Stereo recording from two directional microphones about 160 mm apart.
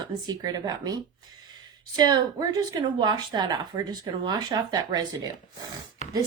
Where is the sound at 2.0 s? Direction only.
25° right (ahead or behind).